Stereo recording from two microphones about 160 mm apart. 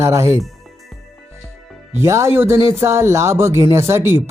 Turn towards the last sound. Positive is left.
turn(degrees=-15)  # may be behind; listen again after turning